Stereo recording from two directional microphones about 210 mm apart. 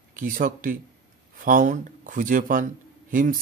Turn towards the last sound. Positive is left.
turn(degrees=-40)  # may be behind; listen again after turning